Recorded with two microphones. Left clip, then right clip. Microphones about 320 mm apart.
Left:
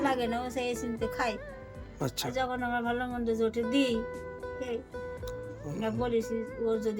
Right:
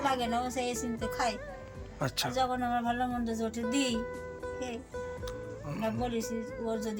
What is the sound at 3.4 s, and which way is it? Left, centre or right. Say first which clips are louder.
Music: left 2 dB; centre.